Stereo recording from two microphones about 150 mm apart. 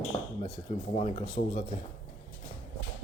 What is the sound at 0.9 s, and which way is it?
Speech, 45° left (ahead or behind).